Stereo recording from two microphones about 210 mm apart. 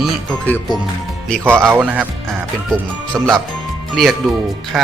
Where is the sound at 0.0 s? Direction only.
10° left (ahead or behind).